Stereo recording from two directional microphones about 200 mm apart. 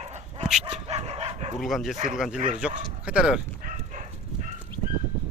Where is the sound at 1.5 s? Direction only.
Centre (ahead or behind).